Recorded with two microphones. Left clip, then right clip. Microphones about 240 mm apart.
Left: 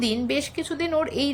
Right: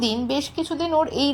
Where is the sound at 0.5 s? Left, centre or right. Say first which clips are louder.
Right 3 dB; left.